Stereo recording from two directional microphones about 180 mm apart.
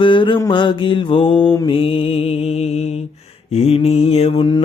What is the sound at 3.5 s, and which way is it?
Mantra, 35° left (ahead or behind).